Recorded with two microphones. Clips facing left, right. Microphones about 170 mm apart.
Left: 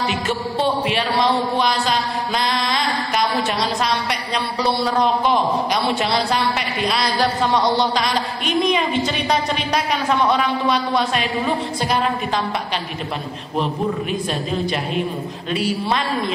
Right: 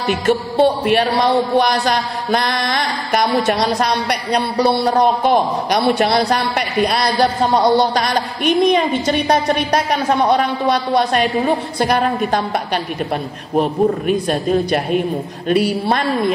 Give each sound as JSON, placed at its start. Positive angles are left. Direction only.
{"t": 0.1, "sound": "a woman's voice", "side_deg": -50}
{"t": 1.6, "sound": "mantra", "side_deg": -60}
{"t": 3.7, "sound": "a woman's voice", "side_deg": -50}
{"t": 6.2, "sound": "a woman's voice", "side_deg": -45}
{"t": 13.6, "sound": "a woman's voice", "side_deg": -50}